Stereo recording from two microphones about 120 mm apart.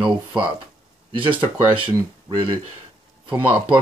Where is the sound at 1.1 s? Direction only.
45° right (ahead or behind).